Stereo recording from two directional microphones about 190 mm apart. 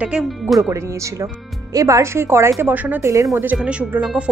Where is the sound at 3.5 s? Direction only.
5° right (ahead or behind).